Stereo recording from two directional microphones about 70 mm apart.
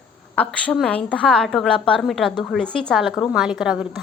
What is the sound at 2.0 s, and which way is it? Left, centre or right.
Speech, centre.